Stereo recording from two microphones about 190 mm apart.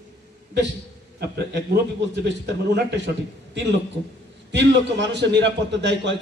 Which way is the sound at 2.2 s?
65° right (ahead or behind).